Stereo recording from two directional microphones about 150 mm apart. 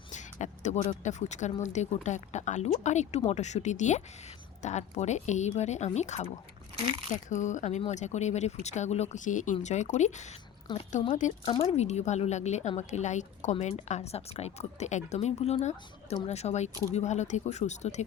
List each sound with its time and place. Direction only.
0.1 s a woman's voice: 55° left (ahead or behind)